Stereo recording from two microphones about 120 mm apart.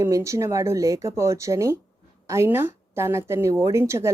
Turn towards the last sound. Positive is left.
turn(degrees=-25)  # may be behind; listen again after turning